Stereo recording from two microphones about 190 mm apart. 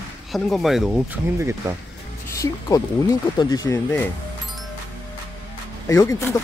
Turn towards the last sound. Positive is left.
turn(degrees=15)  # may be behind; listen again after turning